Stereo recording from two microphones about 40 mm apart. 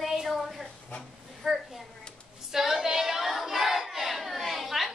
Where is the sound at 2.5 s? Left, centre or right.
Centre.